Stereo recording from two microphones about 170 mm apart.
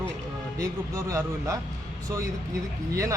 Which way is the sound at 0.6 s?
20° right (ahead or behind).